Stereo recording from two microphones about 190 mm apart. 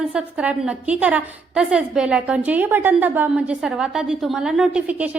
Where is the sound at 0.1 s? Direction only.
5° right (ahead or behind).